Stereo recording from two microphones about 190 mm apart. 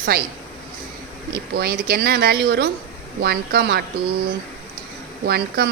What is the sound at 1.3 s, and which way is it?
A woman's voice, 55° right (ahead or behind).